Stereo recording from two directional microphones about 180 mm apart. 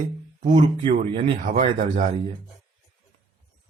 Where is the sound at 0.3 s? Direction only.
40° right (ahead or behind).